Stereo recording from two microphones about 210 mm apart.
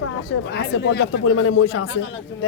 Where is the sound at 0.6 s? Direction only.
60° left (ahead or behind).